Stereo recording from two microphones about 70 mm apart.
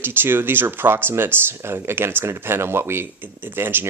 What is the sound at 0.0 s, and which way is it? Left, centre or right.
Speech, right.